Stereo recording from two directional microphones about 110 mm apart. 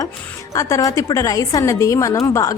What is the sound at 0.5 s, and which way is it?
A woman's voice, 30° left (ahead or behind).